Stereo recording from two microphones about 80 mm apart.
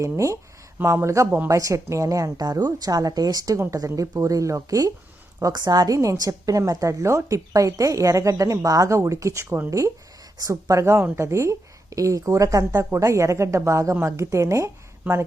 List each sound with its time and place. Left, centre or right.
0.0 s a woman's voice: right
3.6 s speech: right
5.5 s a woman's voice: right